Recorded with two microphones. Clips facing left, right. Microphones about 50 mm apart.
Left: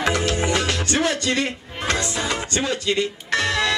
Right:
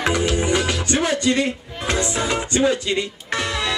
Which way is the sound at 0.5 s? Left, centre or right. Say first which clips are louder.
Right 1 dB; centre.